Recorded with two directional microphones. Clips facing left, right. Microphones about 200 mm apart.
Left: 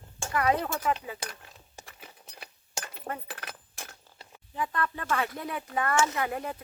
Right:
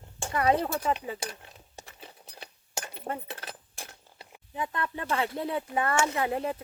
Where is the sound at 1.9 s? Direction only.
25° right (ahead or behind).